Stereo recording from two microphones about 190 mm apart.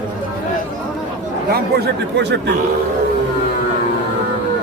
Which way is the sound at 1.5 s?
55° right (ahead or behind).